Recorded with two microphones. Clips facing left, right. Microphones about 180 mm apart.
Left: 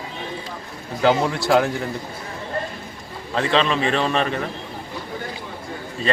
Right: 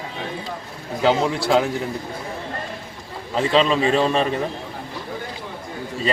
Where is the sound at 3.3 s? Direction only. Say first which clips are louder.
Even; 10° right (ahead or behind).